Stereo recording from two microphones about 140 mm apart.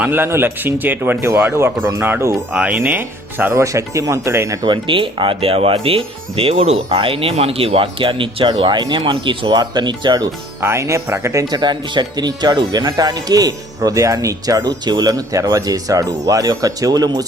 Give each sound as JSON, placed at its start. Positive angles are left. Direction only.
{"t": 0.0, "sound": "speech", "side_deg": -15}
{"t": 10.6, "sound": "speech", "side_deg": -20}